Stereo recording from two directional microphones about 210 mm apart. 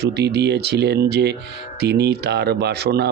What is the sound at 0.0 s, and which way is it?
Speech, 50° right (ahead or behind).